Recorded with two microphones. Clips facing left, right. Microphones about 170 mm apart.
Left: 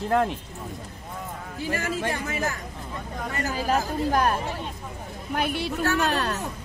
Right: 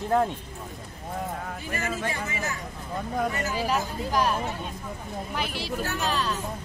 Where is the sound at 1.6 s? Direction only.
75° left (ahead or behind).